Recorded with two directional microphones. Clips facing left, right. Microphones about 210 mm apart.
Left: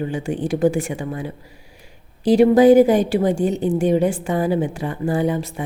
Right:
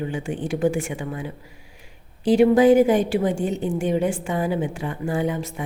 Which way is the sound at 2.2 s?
40° left (ahead or behind).